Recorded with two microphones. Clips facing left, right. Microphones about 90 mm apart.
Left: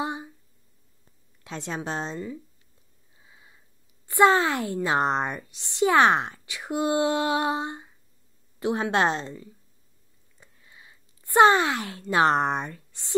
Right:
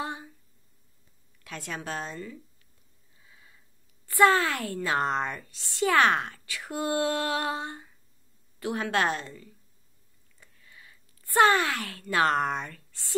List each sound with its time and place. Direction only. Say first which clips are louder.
0.0 s a sound: left 4 dB; 20° left (ahead or behind)
1.4 s a woman's voice: left 4 dB; 25° left (ahead or behind)
3.2 s sniff: left 2 dB; 20° left (ahead or behind)
4.1 s a woman's voice: left 2 dB; 20° left (ahead or behind)